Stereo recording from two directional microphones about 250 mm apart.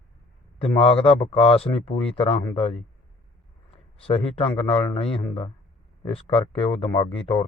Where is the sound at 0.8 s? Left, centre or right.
Left.